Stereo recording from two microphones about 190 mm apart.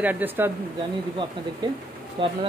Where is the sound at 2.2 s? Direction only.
25° right (ahead or behind).